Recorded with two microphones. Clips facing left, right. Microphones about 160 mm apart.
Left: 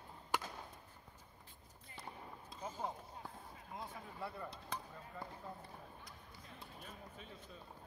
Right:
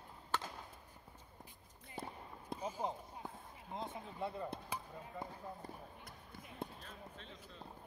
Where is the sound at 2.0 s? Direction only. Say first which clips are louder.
Right 4 dB; 60° right (ahead or behind).